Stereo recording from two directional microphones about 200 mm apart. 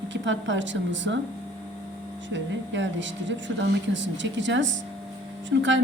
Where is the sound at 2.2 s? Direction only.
65° right (ahead or behind).